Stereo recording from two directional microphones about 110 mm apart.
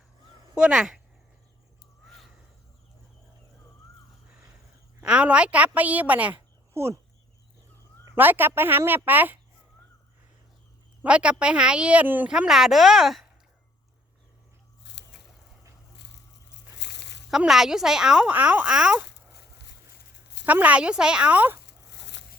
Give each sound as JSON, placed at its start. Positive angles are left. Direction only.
{"t": 0.5, "sound": "speech", "side_deg": -5}
{"t": 4.9, "sound": "speech", "side_deg": -10}
{"t": 6.7, "sound": "speech", "side_deg": -25}
{"t": 8.1, "sound": "speech", "side_deg": -20}
{"t": 11.0, "sound": "speech", "side_deg": -10}
{"t": 12.3, "sound": "speech", "side_deg": -5}
{"t": 17.3, "sound": "speech", "side_deg": -5}
{"t": 20.4, "sound": "speech", "side_deg": -15}